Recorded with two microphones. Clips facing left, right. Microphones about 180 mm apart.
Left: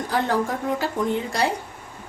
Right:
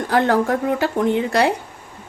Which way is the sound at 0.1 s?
70° right (ahead or behind).